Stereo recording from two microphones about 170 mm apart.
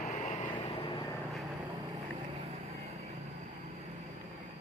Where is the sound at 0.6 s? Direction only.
30° left (ahead or behind).